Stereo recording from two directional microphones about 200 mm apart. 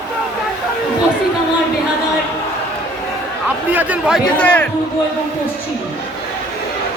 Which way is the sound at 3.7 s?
10° right (ahead or behind).